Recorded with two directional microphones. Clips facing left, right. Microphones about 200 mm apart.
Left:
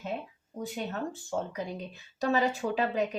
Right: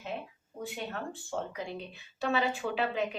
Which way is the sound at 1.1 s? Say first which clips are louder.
Left 3 dB; 40° left (ahead or behind).